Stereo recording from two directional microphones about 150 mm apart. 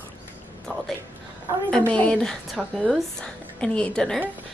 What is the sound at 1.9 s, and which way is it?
A woman's voice, 5° left (ahead or behind).